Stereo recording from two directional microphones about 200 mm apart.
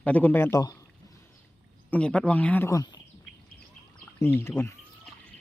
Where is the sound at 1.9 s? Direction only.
5° left (ahead or behind).